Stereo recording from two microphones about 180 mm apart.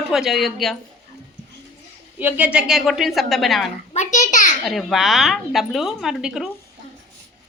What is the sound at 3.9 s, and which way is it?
Speech, 40° left (ahead or behind).